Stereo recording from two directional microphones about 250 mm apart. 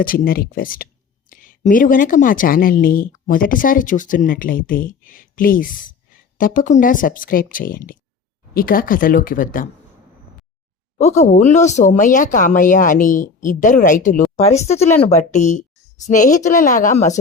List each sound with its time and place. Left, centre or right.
0.0 s speech: left
10.9 s a woman's voice: left